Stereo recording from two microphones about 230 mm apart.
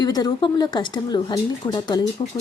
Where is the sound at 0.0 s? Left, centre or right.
Centre.